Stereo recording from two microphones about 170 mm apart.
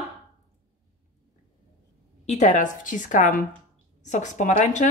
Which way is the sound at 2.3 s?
45° left (ahead or behind).